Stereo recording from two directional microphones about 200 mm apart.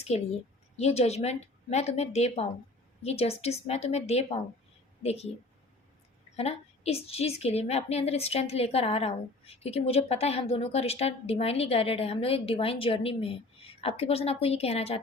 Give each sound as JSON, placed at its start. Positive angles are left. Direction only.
{"t": 0.0, "sound": "a woman's voice", "side_deg": 30}
{"t": 6.3, "sound": "a woman's voice", "side_deg": 30}